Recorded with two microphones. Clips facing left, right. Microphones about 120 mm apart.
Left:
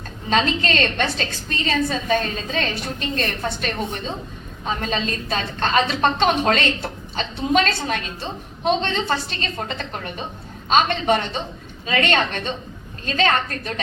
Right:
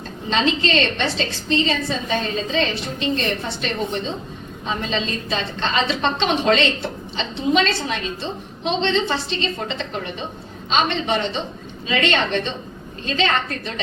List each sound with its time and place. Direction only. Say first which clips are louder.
0.3 s a woman's voice: even; 50° left (ahead or behind)